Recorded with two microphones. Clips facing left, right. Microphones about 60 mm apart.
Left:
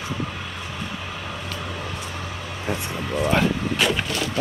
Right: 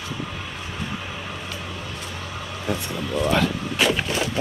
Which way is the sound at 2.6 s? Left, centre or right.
Centre.